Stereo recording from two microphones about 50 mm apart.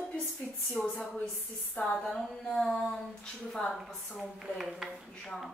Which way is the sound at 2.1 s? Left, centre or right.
Centre.